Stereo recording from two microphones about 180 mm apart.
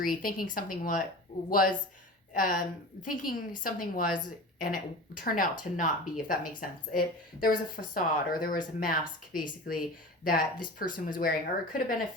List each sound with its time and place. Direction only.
0.0 s speech: 50° left (ahead or behind)